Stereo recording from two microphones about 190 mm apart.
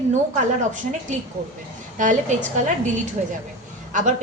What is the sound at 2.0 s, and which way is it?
Speech, 40° right (ahead or behind).